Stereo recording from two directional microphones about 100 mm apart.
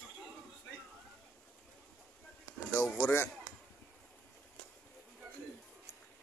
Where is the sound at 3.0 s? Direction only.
25° left (ahead or behind).